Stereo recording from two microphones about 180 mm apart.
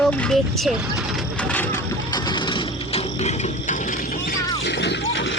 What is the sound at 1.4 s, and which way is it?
Vehicle, 10° left (ahead or behind).